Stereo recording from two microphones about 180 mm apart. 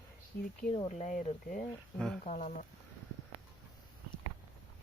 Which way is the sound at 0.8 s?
40° left (ahead or behind).